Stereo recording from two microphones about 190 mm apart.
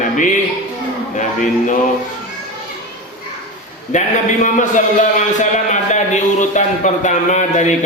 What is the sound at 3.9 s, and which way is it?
Music, 40° left (ahead or behind).